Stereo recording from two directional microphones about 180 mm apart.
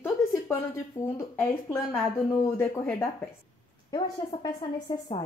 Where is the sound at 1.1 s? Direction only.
10° left (ahead or behind).